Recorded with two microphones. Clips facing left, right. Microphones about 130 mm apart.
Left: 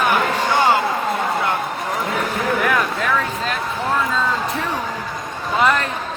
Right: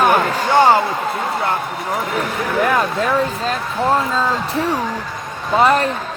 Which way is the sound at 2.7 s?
35° right (ahead or behind).